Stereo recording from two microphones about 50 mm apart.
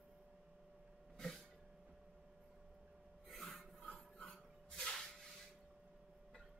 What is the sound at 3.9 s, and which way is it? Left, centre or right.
Filing, centre.